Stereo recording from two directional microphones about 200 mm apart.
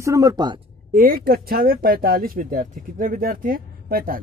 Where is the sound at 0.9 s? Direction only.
45° right (ahead or behind).